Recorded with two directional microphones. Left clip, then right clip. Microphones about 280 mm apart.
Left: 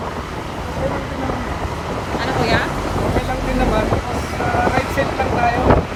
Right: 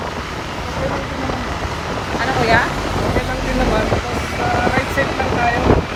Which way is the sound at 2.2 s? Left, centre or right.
Centre.